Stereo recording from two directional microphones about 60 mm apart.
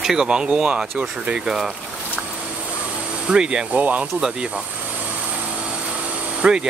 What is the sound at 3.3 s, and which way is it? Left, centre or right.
Speech, centre.